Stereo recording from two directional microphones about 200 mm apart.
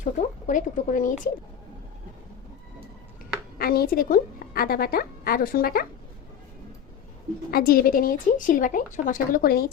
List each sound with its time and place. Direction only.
0.0 s speech: 40° left (ahead or behind)
3.6 s a woman's voice: 50° left (ahead or behind)
7.5 s a woman's voice: 45° left (ahead or behind)